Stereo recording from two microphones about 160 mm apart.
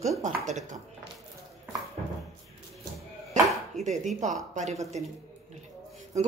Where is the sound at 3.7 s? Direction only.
45° right (ahead or behind).